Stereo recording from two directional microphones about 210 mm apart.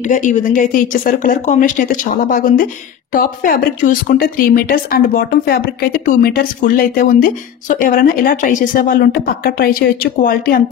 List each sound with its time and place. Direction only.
0.1 s a woman's voice: 35° left (ahead or behind)